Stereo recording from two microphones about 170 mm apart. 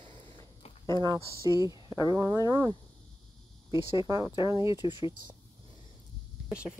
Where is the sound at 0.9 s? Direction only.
25° right (ahead or behind).